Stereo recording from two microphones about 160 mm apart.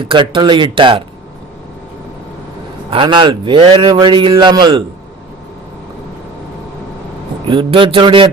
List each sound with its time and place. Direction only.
0.0 s speech: 30° right (ahead or behind)
2.9 s a man's voice: 30° right (ahead or behind)
7.5 s speech: 30° right (ahead or behind)